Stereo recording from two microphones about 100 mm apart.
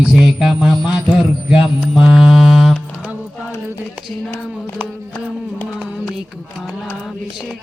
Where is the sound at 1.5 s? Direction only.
15° right (ahead or behind).